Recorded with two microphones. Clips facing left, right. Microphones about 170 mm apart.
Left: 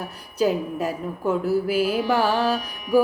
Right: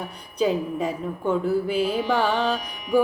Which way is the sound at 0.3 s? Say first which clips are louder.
Left 1 dB; 5° left (ahead or behind).